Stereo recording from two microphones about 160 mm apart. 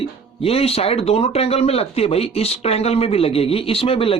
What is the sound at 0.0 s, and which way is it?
Speech, 35° left (ahead or behind).